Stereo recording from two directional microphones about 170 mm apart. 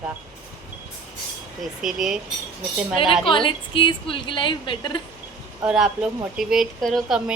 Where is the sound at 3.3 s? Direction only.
30° left (ahead or behind).